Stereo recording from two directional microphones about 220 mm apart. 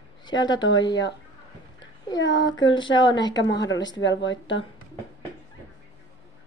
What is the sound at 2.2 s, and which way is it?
Speech, 55° left (ahead or behind).